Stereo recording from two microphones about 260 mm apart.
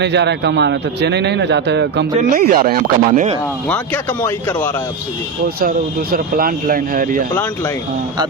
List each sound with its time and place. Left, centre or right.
0.0 s a man's voice: right
3.7 s speech: centre
5.5 s a man's voice: right